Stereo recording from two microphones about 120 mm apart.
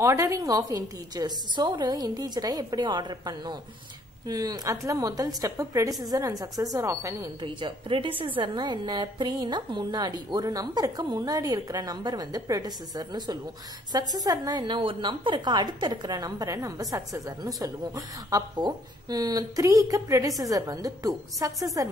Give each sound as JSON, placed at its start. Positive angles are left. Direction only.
{"t": 0.0, "sound": "a woman's voice", "side_deg": -25}
{"t": 7.4, "sound": "a woman's voice", "side_deg": -45}